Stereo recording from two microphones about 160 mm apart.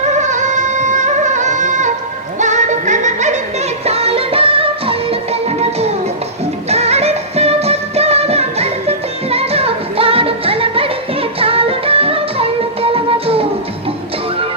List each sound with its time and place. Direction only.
0.0 s music: 45° right (ahead or behind)